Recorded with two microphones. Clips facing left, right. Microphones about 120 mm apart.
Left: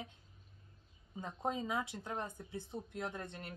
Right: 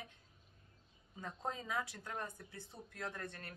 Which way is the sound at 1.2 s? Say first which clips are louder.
Left 5 dB; 20° left (ahead or behind).